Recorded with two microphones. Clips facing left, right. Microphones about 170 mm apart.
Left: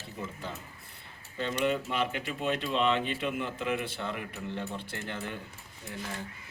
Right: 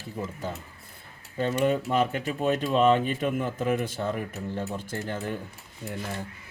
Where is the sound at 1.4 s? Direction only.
45° right (ahead or behind).